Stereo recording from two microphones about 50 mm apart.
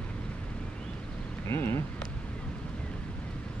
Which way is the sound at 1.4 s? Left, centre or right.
Left.